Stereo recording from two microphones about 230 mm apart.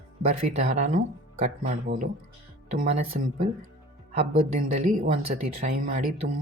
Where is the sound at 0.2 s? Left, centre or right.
Right.